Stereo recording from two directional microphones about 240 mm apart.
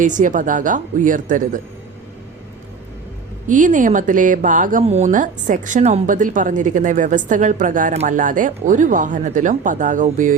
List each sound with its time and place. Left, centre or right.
0.0 s speech: right
3.5 s speech: right